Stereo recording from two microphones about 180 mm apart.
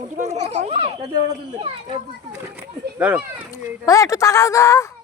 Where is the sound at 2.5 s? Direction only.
5° right (ahead or behind).